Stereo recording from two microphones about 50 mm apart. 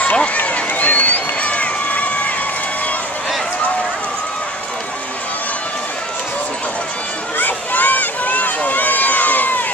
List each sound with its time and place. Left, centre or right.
0.0 s run: left
7.3 s run: left